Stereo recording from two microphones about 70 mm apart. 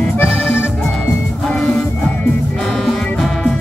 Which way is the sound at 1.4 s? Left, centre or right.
Centre.